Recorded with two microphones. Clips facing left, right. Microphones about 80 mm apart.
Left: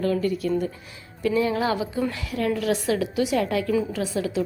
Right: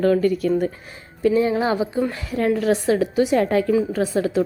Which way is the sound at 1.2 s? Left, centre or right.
Right.